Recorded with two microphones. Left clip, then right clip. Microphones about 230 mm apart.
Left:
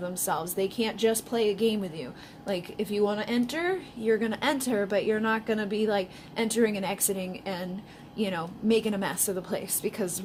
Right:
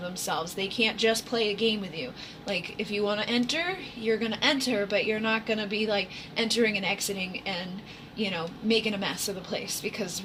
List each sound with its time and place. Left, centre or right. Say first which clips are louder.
0.3 s speech: left 1 dB; left